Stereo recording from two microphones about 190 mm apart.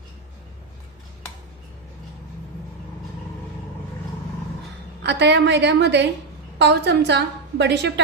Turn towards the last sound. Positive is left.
turn(degrees=-65)  # may be behind; listen again after turning